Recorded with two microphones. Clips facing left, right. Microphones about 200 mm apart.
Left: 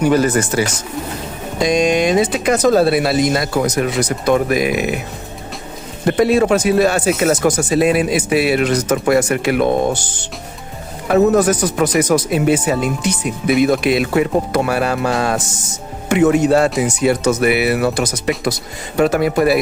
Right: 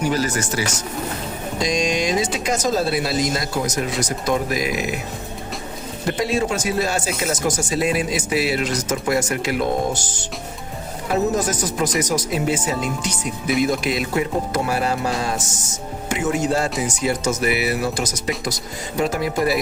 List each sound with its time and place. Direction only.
0.0 s speech: 60° left (ahead or behind)
1.6 s speech: 60° left (ahead or behind)
6.1 s speech: 55° left (ahead or behind)
11.1 s speech: 60° left (ahead or behind)